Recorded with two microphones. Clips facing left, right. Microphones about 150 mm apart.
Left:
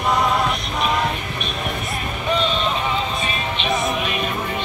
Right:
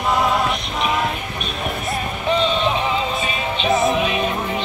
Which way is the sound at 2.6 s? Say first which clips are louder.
Right 3 dB; 10° right (ahead or behind).